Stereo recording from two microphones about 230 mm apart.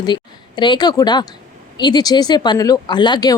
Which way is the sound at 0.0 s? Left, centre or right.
Centre.